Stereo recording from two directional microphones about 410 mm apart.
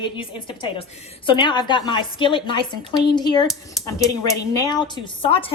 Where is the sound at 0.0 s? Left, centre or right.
Centre.